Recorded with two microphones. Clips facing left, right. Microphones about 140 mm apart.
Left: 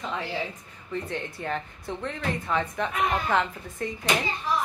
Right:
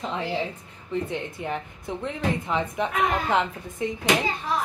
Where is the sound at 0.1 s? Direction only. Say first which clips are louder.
Right 3 dB; 20° right (ahead or behind).